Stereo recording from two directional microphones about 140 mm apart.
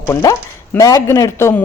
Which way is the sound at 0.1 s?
25° left (ahead or behind).